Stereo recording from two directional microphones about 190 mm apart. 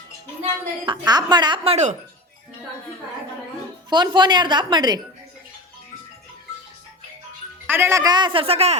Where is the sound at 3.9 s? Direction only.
25° right (ahead or behind).